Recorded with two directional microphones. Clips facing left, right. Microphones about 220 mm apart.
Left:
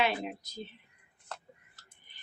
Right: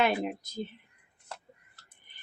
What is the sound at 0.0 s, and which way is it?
Speech, 50° right (ahead or behind).